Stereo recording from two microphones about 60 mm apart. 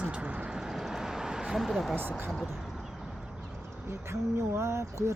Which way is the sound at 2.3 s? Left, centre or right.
Centre.